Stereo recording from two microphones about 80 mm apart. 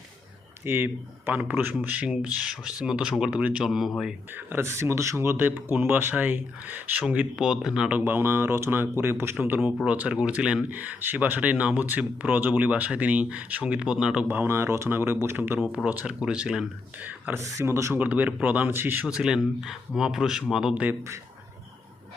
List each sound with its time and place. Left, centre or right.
0.6 s speech: right; by 3.9 s centre
4.4 s speech: right
7.3 s speech: centre
7.9 s speech: right
9.8 s speech: centre
14.3 s speech: right; by 16.6 s centre
17.0 s speech: right
17.4 s speech: right
17.9 s speech: right
18.7 s speech: right
19.0 s speech: centre